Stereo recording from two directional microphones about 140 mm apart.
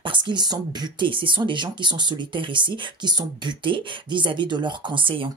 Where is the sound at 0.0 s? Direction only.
35° right (ahead or behind).